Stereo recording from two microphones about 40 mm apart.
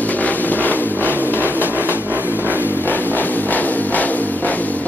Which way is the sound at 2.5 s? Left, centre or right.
Left.